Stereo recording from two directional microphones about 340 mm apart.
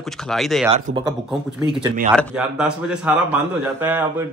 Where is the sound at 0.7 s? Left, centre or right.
Centre.